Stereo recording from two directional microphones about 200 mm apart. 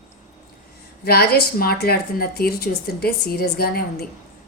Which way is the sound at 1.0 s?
50° left (ahead or behind).